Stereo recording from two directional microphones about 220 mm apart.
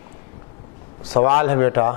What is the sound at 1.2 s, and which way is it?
Speech, 15° left (ahead or behind).